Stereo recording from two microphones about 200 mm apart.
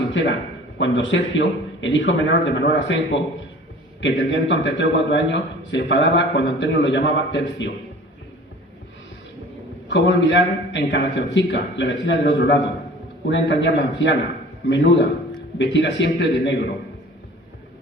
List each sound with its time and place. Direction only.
0.1 s a man's voice: 65° left (ahead or behind)
9.9 s a man's voice: 65° left (ahead or behind)